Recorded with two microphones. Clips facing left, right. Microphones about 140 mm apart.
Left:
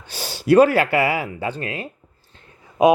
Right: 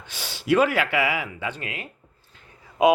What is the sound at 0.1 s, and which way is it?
Speech, 40° left (ahead or behind).